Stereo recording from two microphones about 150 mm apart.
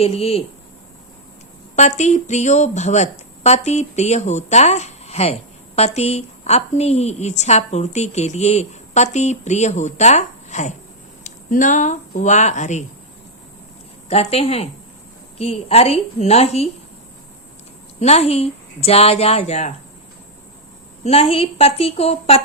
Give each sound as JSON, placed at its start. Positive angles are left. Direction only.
{"t": 0.0, "sound": "speech", "side_deg": 40}
{"t": 1.7, "sound": "speech", "side_deg": 50}
{"t": 14.1, "sound": "speech", "side_deg": 45}
{"t": 18.0, "sound": "speech", "side_deg": 45}
{"t": 21.0, "sound": "speech", "side_deg": 45}